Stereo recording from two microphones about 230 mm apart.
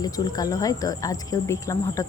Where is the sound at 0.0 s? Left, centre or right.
Centre.